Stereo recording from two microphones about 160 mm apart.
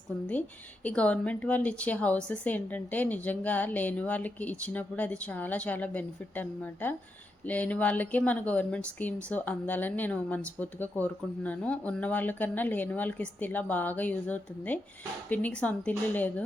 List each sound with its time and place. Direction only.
0.9 s speech: 10° left (ahead or behind)